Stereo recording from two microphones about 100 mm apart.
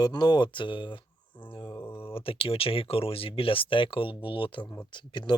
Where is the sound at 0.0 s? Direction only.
45° left (ahead or behind).